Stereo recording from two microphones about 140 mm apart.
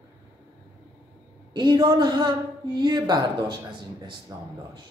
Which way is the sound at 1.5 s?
30° right (ahead or behind).